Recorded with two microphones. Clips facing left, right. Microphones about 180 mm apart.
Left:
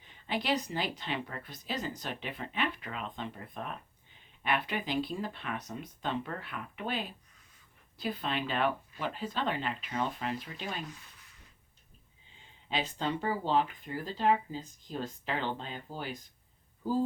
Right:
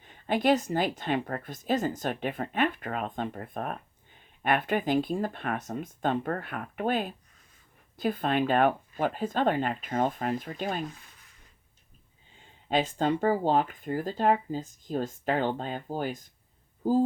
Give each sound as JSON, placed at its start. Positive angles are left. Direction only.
{"t": 0.0, "sound": "speech", "side_deg": -50}
{"t": 12.6, "sound": "speech", "side_deg": -45}